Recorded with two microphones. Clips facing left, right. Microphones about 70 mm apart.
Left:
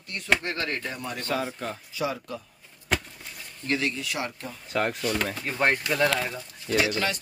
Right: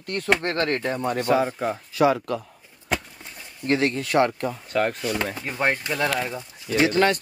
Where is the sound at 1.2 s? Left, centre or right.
Centre.